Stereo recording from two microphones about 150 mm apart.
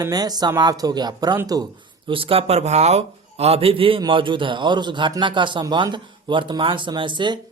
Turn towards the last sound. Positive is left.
turn(degrees=-30)  # may be behind; listen again after turning